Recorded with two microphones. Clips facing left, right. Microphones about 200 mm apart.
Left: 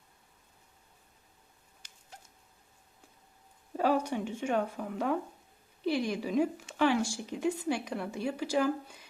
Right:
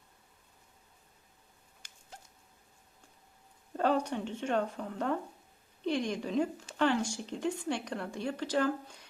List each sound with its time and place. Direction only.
1.8 s rodents: 50° right (ahead or behind)
3.7 s speech: 10° left (ahead or behind)